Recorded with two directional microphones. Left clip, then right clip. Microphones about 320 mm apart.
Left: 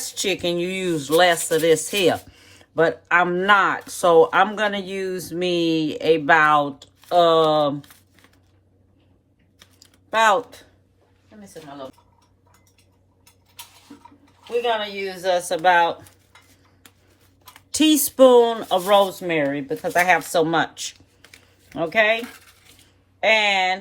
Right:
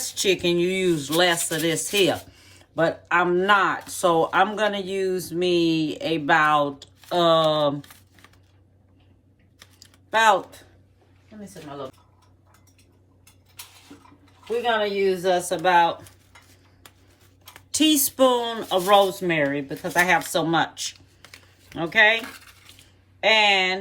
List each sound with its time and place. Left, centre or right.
0.0 s speech: left
7.8 s typing: centre
10.2 s speech: left
15.1 s speech: left
17.7 s speech: left
21.2 s typing: centre
21.8 s speech: centre
23.2 s speech: left